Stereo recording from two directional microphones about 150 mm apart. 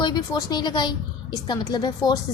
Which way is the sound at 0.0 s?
30° left (ahead or behind).